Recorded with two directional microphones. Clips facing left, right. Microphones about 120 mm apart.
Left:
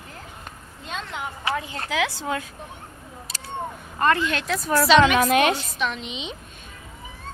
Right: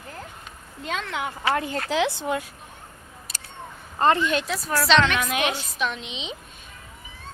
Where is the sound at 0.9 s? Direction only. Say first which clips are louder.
Right 3 dB; 90° right.